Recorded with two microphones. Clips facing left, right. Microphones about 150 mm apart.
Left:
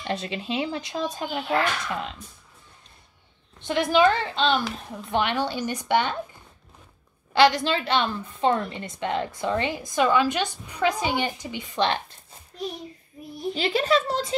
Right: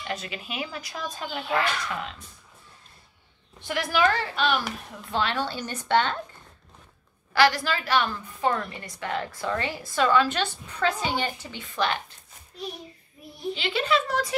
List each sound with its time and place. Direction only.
0.0 s a woman's voice: 30° left (ahead or behind)
3.6 s a woman's voice: 20° left (ahead or behind)
7.3 s a woman's voice: 20° left (ahead or behind)
13.6 s speech: 40° left (ahead or behind)